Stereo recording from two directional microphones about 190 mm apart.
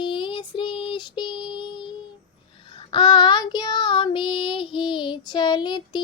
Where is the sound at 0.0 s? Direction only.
25° left (ahead or behind).